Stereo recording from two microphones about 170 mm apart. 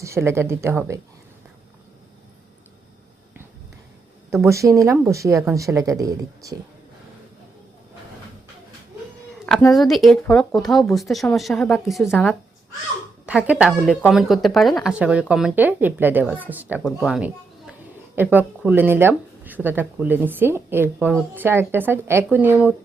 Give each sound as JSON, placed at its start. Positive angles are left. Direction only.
{"t": 0.0, "sound": "speech", "side_deg": -15}
{"t": 4.4, "sound": "speech", "side_deg": -15}
{"t": 9.7, "sound": "speech", "side_deg": 0}
{"t": 13.2, "sound": "speech", "side_deg": -5}